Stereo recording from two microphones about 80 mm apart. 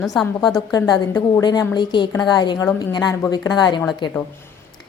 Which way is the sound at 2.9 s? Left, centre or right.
Left.